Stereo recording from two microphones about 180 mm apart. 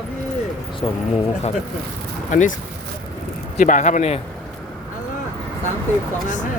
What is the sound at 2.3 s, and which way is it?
Speech, 45° left (ahead or behind).